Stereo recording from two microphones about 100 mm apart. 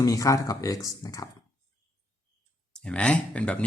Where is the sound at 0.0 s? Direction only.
35° left (ahead or behind).